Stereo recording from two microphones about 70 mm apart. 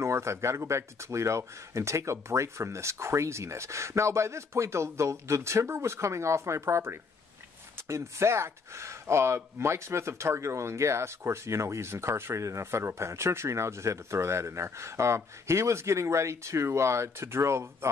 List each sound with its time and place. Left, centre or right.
0.0 s speech: right